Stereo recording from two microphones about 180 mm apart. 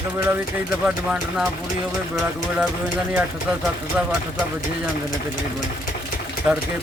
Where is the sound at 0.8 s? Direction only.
5° right (ahead or behind).